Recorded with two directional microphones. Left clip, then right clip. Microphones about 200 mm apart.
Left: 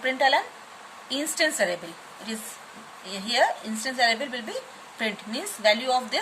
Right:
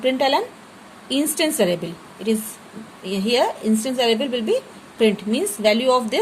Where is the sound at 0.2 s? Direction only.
25° right (ahead or behind).